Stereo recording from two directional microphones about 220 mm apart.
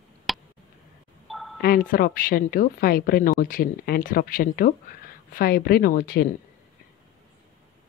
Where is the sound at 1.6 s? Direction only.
40° left (ahead or behind).